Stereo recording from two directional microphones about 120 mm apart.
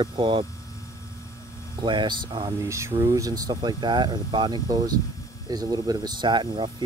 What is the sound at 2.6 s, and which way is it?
Speech, 25° right (ahead or behind).